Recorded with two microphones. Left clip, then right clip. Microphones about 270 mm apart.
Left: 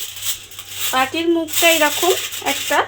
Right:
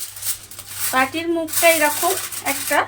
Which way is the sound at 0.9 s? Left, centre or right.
Left.